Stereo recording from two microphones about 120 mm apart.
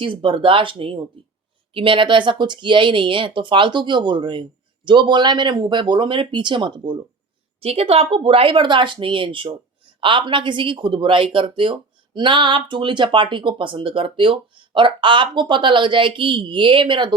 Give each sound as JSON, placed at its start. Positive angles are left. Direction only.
{"t": 0.0, "sound": "speech", "side_deg": -45}
{"t": 7.6, "sound": "speech", "side_deg": -55}